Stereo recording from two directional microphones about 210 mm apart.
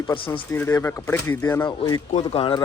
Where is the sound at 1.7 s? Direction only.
20° left (ahead or behind).